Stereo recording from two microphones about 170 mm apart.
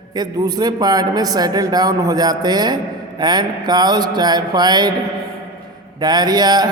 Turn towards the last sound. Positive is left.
turn(degrees=-25)  # may be behind; listen again after turning